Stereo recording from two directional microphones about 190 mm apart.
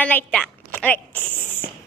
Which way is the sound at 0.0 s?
5° left (ahead or behind).